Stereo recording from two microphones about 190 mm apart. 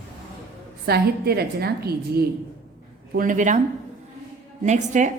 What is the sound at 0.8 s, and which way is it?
A woman's voice, 55° right (ahead or behind).